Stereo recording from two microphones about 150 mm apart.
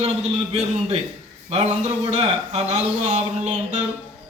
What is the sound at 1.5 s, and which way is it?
A man's voice, 45° right (ahead or behind).